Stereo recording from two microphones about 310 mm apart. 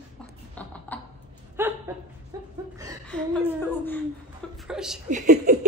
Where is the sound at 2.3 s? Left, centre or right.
Centre.